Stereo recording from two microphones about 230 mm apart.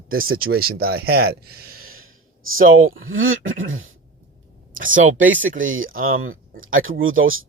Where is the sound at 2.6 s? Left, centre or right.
Right.